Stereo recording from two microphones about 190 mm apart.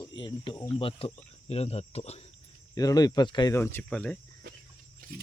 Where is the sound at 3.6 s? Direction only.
10° left (ahead or behind).